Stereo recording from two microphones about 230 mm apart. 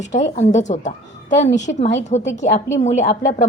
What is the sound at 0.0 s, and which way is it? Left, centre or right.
A woman's voice, left.